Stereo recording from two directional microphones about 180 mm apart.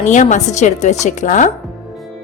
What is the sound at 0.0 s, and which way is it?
A woman's voice, 45° left (ahead or behind).